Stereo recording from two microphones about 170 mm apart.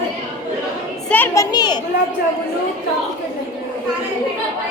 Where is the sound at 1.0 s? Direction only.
10° left (ahead or behind).